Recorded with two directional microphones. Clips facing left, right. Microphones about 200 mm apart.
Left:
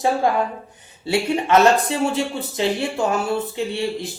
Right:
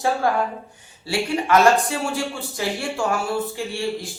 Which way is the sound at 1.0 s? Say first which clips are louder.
Left 3 dB; 25° left (ahead or behind).